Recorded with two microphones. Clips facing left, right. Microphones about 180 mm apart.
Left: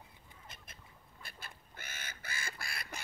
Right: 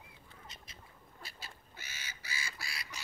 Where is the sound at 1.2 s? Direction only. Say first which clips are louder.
Even; 55° left (ahead or behind).